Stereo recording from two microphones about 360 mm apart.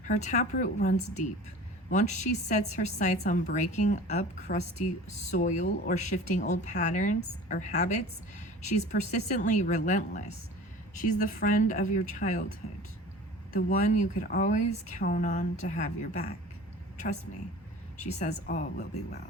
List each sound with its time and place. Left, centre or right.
0.0 s a woman's voice: centre
13.7 s a woman's voice: left
18.0 s a woman's voice: centre